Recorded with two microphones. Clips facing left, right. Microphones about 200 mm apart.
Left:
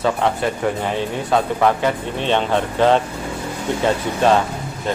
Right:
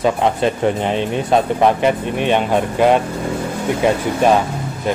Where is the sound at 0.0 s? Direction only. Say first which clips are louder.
Right 3 dB; 20° right (ahead or behind).